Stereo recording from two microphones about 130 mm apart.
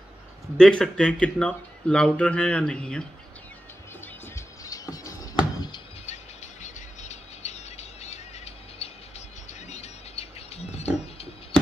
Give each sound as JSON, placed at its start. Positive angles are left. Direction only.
{"t": 0.6, "sound": "speech", "side_deg": 5}
{"t": 4.4, "sound": "a sound", "side_deg": 25}
{"t": 6.0, "sound": "squeal", "side_deg": 65}
{"t": 9.5, "sound": "music", "side_deg": 60}